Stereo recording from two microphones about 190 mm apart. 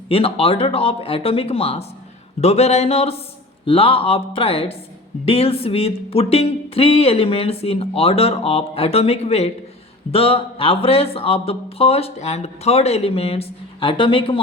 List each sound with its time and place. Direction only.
0.1 s speech: 30° left (ahead or behind)